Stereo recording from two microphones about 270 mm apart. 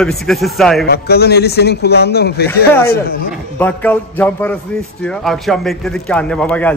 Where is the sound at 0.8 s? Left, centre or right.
Left.